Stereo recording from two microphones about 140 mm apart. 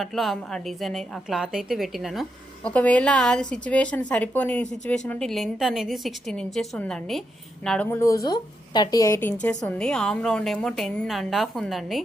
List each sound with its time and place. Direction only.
0.0 s a woman's voice: centre (ahead or behind)
2.6 s a woman's voice: 10° left (ahead or behind)
7.9 s a woman's voice: 20° left (ahead or behind); by 12.0 s centre (ahead or behind)